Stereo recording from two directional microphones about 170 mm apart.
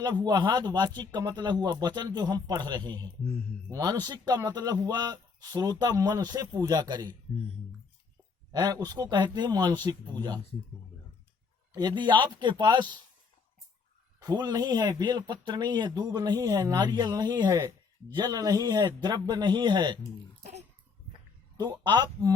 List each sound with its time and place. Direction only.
0.0 s speech: 25° right (ahead or behind)
8.5 s speech: 20° right (ahead or behind)
11.7 s speech: 25° right (ahead or behind)
14.2 s speech: 25° right (ahead or behind)
20.4 s a sound: 40° right (ahead or behind)
21.6 s speech: 25° right (ahead or behind)